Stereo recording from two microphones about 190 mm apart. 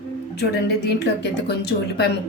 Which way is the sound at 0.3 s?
60° left (ahead or behind).